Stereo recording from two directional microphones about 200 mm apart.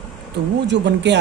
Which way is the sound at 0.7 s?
60° right (ahead or behind).